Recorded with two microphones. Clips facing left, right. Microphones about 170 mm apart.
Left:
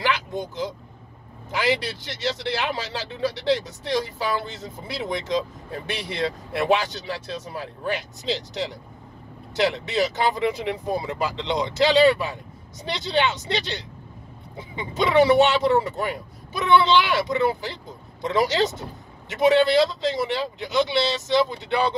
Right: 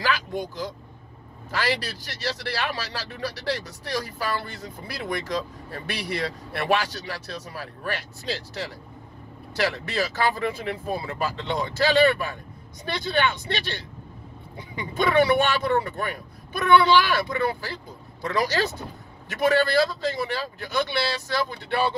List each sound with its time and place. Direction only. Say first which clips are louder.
0.0 s vehicle: left 1 dB; 20° left (ahead or behind)
1.5 s speech: left 3 dB; 20° left (ahead or behind)
14.6 s speech: left 1 dB; 25° left (ahead or behind)